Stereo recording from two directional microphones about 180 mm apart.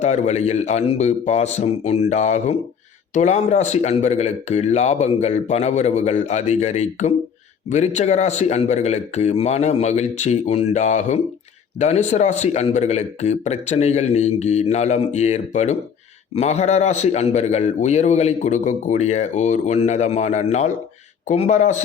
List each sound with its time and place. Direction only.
0.0 s a man's voice: 40° left (ahead or behind)